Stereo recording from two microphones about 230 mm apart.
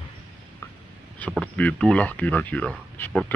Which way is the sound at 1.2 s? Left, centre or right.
Centre.